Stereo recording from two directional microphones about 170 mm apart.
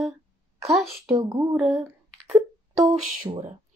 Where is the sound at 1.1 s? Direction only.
25° right (ahead or behind).